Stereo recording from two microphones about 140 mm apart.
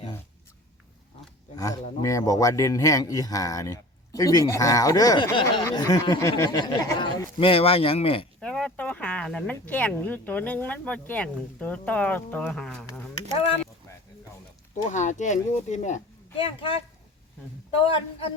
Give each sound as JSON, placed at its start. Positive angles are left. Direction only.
{"t": 1.5, "sound": "a man's voice", "side_deg": 25}
{"t": 7.3, "sound": "speech", "side_deg": 40}
{"t": 8.4, "sound": "speech", "side_deg": 5}
{"t": 14.8, "sound": "speech", "side_deg": 60}
{"t": 16.4, "sound": "speech", "side_deg": 40}